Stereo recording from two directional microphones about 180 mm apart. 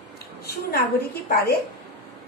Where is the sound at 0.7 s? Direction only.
60° left (ahead or behind).